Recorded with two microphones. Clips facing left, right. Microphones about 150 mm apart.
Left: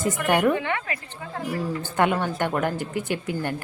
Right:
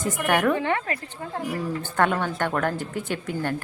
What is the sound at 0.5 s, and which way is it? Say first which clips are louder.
Speech: right 2 dB; 35° right (ahead or behind).